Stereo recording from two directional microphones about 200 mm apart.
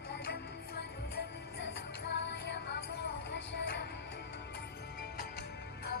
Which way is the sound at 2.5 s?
55° left (ahead or behind).